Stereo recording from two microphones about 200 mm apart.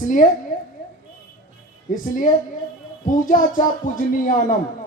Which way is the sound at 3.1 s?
40° left (ahead or behind).